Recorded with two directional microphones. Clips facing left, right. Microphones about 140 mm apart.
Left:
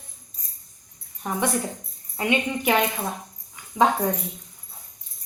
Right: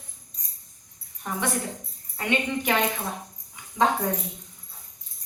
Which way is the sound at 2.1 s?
10° left (ahead or behind).